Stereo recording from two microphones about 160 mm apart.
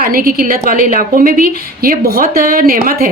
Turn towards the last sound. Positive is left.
turn(degrees=-65)  # may be behind; listen again after turning